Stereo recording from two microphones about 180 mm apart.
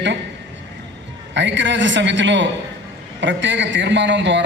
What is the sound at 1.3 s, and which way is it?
A man's voice, 85° right.